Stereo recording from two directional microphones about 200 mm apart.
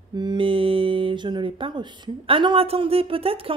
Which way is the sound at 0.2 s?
25° right (ahead or behind).